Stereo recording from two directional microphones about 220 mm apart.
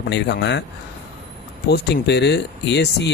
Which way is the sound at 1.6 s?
50° left (ahead or behind).